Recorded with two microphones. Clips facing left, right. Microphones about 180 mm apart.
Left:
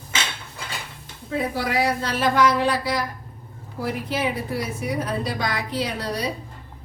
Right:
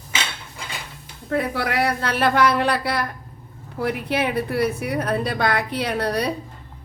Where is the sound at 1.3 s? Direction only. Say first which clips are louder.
Right 2 dB; 65° right (ahead or behind).